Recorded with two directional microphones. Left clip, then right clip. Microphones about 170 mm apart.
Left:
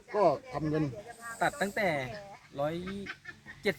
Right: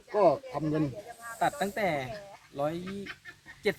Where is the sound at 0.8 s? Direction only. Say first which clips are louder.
Right 2 dB; 40° right (ahead or behind).